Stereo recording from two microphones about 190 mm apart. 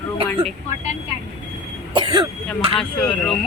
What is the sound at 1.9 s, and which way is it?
Throat clearing, 25° right (ahead or behind).